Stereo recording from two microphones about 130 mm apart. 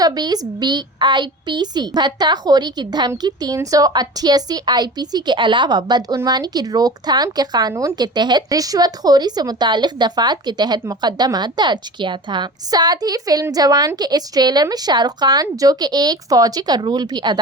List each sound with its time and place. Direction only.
0.0 s speech: 30° right (ahead or behind)